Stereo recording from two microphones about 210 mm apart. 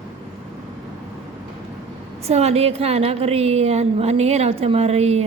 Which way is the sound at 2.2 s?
30° right (ahead or behind).